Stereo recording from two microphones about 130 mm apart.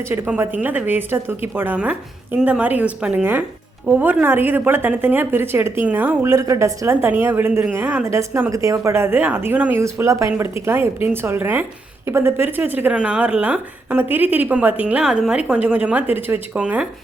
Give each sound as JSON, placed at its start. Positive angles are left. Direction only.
{"t": 0.1, "sound": "speech", "side_deg": -20}
{"t": 6.3, "sound": "a woman's voice", "side_deg": -25}